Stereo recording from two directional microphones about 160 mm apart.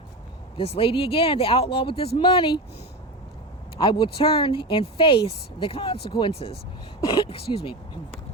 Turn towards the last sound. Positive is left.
turn(degrees=40)  # may be behind; listen again after turning